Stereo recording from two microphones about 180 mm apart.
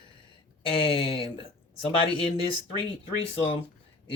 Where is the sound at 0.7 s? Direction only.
30° left (ahead or behind).